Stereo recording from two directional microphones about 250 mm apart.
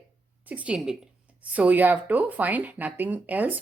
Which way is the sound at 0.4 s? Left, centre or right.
Centre.